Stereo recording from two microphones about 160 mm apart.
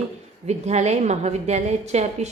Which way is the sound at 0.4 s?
45° right (ahead or behind).